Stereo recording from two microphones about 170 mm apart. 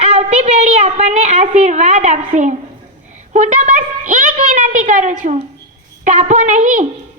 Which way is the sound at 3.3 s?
45° right (ahead or behind).